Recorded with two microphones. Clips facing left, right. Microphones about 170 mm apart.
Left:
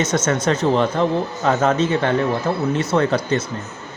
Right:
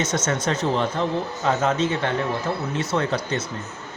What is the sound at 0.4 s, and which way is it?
Speech, 65° left (ahead or behind).